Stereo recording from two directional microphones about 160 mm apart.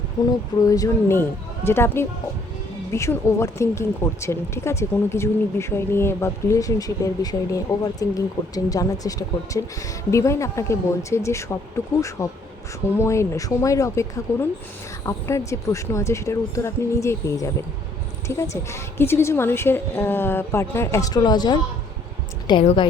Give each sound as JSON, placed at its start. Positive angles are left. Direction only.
{"t": 0.2, "sound": "speech", "side_deg": 25}
{"t": 18.5, "sound": "speech", "side_deg": 15}
{"t": 22.6, "sound": "a woman's voice", "side_deg": 35}